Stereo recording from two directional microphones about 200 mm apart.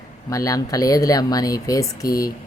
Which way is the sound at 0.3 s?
15° left (ahead or behind).